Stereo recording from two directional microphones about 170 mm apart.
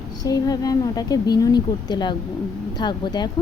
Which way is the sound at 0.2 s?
20° left (ahead or behind).